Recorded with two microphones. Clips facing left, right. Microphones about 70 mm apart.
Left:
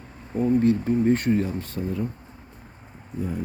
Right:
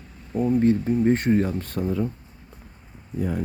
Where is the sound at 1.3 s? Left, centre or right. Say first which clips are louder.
Right 2 dB; right.